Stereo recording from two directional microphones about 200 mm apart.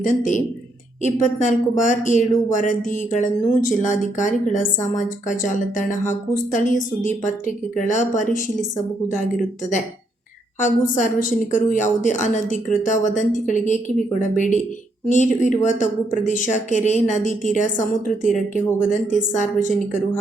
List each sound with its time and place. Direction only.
0.0 s a woman's voice: 40° left (ahead or behind)